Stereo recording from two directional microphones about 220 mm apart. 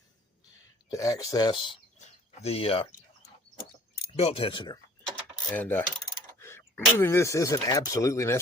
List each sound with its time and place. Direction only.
0.9 s speech: 15° left (ahead or behind)
2.0 s a sound: 30° left (ahead or behind)
4.2 s speech: 25° left (ahead or behind)
5.5 s speech: 10° left (ahead or behind)